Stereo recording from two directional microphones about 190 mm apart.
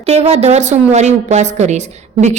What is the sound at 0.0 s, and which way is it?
A woman's voice, 35° right (ahead or behind).